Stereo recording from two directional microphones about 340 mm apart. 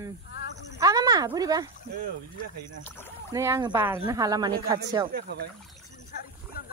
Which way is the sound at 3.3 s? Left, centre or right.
Centre.